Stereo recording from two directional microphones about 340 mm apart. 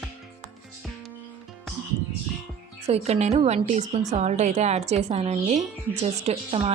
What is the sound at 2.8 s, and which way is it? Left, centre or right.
A woman's voice, centre.